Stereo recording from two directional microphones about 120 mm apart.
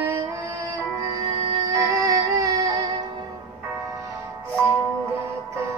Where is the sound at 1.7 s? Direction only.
30° right (ahead or behind).